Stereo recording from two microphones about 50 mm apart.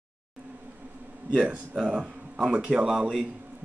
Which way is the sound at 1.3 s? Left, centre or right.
Centre.